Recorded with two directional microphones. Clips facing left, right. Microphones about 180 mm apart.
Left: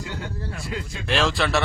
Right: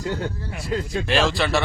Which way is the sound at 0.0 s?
40° right (ahead or behind).